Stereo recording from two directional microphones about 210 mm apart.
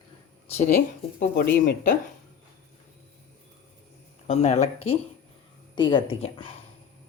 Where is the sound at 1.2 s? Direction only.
45° left (ahead or behind).